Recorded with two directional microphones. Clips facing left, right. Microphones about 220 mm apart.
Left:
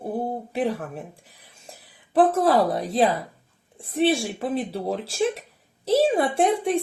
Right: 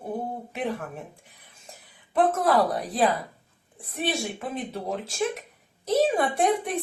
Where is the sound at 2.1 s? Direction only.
30° left (ahead or behind).